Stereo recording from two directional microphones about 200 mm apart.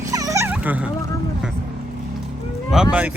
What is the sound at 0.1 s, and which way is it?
Dog, 15° right (ahead or behind).